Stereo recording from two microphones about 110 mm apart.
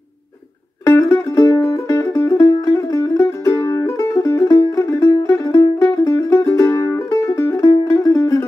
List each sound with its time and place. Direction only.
0.8 s music: 30° left (ahead or behind)